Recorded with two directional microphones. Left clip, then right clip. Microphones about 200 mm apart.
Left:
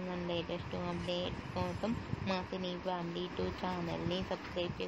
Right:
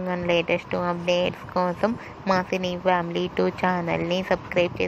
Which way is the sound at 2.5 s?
75° right (ahead or behind).